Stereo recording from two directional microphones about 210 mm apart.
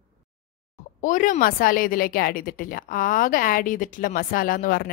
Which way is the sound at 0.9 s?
40° left (ahead or behind).